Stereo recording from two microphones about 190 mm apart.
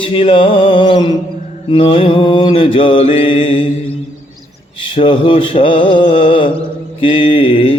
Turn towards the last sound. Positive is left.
turn(degrees=30)  # may be behind; listen again after turning